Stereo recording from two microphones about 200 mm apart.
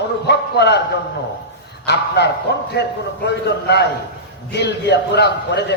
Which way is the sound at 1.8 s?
55° left (ahead or behind).